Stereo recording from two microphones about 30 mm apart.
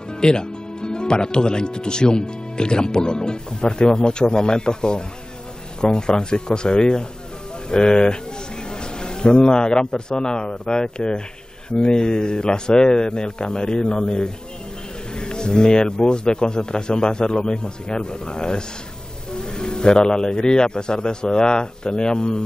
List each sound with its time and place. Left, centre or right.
0.1 s a man's voice: left